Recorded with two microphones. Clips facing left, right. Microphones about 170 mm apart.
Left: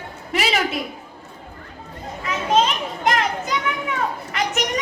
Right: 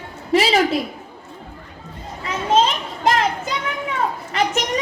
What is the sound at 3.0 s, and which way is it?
Children playing, 30° right (ahead or behind).